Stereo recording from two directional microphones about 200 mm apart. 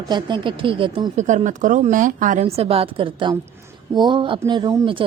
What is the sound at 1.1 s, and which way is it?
A woman's voice, 35° right (ahead or behind).